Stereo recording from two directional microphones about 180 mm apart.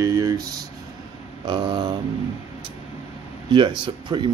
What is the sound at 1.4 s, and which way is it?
Speech, 25° right (ahead or behind).